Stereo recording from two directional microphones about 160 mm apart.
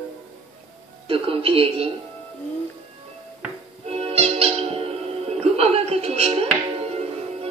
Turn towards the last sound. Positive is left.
turn(degrees=-40)  # may be behind; listen again after turning